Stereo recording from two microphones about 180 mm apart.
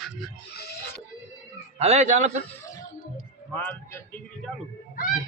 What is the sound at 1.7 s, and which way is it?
Speech, 35° right (ahead or behind).